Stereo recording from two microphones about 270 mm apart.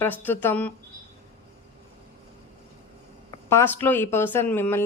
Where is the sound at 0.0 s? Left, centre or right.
Centre.